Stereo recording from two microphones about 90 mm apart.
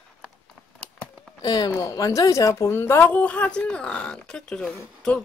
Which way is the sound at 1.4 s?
45° left (ahead or behind).